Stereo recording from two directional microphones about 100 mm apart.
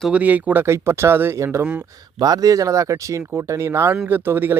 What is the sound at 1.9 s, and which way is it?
Speech, 40° right (ahead or behind).